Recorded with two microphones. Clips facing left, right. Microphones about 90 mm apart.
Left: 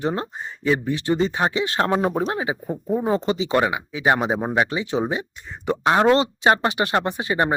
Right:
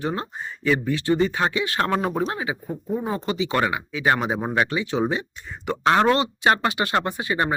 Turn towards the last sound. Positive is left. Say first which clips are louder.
# left 2 dB
turn(degrees=25)  # may be behind; listen again after turning